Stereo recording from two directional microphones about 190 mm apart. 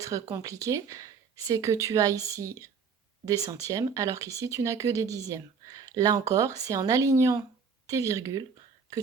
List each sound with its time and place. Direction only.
0.0 s speech: 15° right (ahead or behind)